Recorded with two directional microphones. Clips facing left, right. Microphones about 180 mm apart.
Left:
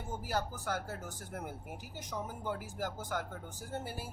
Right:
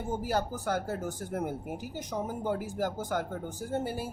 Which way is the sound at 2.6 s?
25° right (ahead or behind).